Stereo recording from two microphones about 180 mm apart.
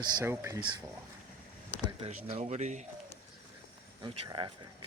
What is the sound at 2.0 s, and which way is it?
Speech, 35° right (ahead or behind).